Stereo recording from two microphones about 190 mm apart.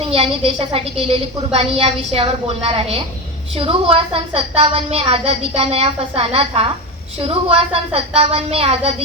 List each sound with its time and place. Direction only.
0.0 s a woman's voice: 30° right (ahead or behind)